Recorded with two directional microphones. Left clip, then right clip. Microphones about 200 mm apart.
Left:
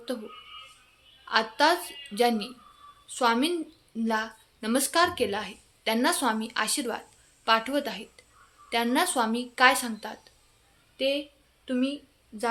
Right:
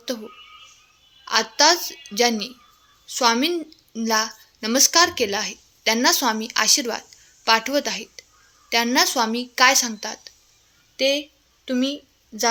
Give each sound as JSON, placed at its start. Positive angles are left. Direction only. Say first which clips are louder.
{"t": 1.2, "sound": "a woman's voice", "louder": "right 5 dB", "side_deg": -25}